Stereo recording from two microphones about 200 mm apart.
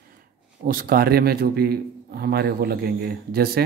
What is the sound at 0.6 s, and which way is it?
A man's voice, 45° right (ahead or behind).